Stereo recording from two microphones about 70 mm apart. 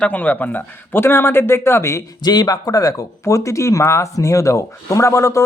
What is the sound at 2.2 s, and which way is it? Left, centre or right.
Speech, left.